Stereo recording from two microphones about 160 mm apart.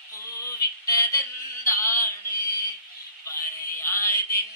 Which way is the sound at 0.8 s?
20° left (ahead or behind).